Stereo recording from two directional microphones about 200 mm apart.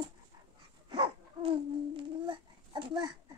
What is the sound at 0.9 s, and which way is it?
Babbling, 25° right (ahead or behind).